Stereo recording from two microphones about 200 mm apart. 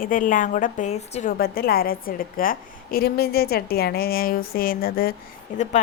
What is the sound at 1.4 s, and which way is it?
A woman's voice, 50° left (ahead or behind).